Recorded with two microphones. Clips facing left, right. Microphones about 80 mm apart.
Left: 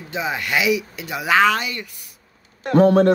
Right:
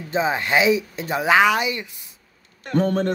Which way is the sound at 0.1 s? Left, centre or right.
Right.